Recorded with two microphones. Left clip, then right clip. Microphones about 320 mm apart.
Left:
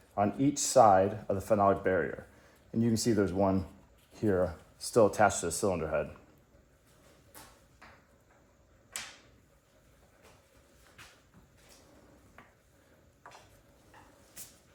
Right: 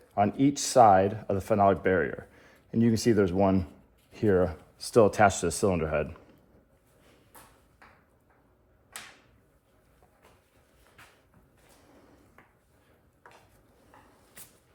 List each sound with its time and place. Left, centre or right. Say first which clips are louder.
0.5 s speech: right 3 dB; right